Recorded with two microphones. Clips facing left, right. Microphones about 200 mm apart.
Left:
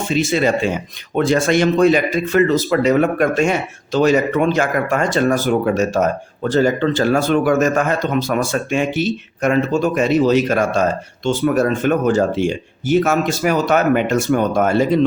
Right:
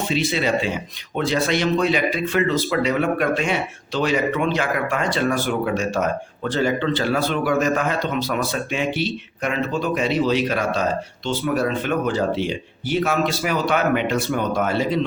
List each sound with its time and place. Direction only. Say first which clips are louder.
0.1 s speech: left 6 dB; 45° left (ahead or behind)